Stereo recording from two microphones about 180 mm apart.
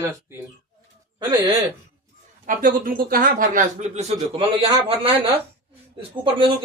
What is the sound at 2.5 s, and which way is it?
A man's voice, 50° right (ahead or behind).